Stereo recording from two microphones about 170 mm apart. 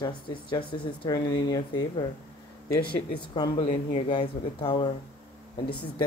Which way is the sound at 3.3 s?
30° left (ahead or behind).